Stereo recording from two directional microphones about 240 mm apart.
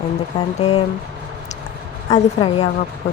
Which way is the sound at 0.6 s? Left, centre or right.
Left.